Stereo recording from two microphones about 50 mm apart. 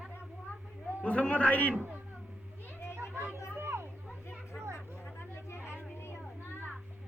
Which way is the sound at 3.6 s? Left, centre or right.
Right.